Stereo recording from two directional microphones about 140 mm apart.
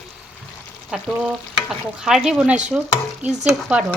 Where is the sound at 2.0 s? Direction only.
5° right (ahead or behind).